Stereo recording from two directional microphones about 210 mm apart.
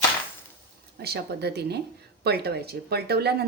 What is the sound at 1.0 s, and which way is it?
Speech, 50° right (ahead or behind).